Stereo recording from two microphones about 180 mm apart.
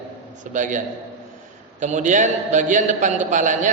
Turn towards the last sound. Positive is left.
turn(degrees=-45)  # may be behind; listen again after turning